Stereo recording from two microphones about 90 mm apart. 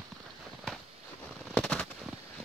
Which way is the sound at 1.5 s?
10° left (ahead or behind).